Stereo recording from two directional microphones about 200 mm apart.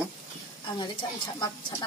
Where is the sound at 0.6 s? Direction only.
20° left (ahead or behind).